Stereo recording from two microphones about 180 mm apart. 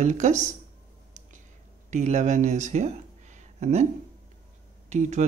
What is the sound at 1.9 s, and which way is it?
Speech, 40° right (ahead or behind).